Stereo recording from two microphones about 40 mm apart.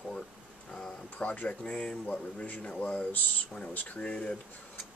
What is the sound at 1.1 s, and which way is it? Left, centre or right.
Speech, left.